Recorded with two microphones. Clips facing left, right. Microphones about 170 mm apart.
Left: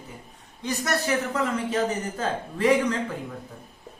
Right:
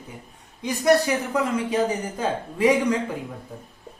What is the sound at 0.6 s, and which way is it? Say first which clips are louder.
Speech: right 8 dB; 15° right (ahead or behind).